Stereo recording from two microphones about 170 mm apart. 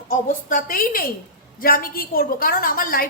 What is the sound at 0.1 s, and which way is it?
A woman's voice, 55° left (ahead or behind).